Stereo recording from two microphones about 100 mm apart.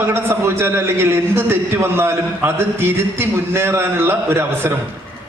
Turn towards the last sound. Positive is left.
turn(degrees=-25)  # may be behind; listen again after turning